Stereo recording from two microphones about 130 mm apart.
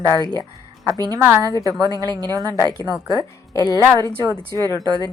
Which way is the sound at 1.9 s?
30° right (ahead or behind).